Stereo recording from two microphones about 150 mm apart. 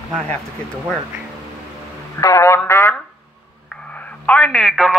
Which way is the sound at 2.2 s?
20° left (ahead or behind).